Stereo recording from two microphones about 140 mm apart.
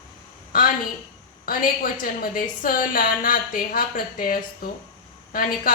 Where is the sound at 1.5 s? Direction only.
90° left.